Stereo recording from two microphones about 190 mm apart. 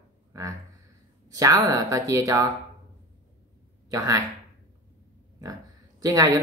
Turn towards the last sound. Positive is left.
turn(degrees=-20)  # may be behind; listen again after turning